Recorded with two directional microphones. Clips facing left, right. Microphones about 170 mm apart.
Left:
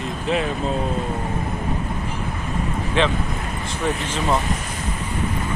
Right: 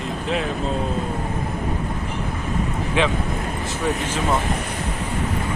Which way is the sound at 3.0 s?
10° right (ahead or behind).